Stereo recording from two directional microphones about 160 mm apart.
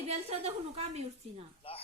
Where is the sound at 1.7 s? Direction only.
35° left (ahead or behind).